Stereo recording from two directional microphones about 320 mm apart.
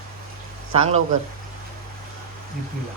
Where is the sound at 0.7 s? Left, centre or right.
Centre.